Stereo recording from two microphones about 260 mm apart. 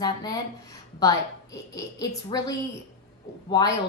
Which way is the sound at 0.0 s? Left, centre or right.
Centre.